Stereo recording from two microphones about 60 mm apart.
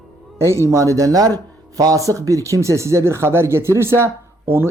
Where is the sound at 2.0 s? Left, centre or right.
Right.